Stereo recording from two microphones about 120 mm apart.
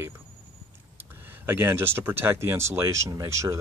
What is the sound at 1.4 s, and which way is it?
Speech, 15° right (ahead or behind).